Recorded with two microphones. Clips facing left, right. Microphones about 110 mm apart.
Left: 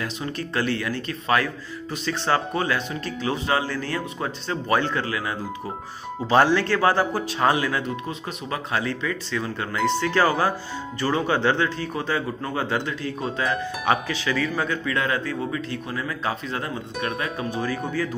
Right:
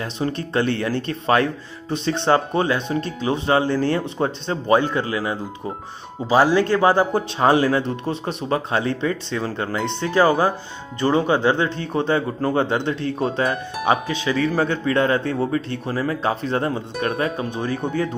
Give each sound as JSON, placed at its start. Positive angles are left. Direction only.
{"t": 0.0, "sound": "speech", "side_deg": -30}
{"t": 6.2, "sound": "speech", "side_deg": -10}
{"t": 13.8, "sound": "speech", "side_deg": -20}
{"t": 14.3, "sound": "speech", "side_deg": -35}
{"t": 17.5, "sound": "speech", "side_deg": -25}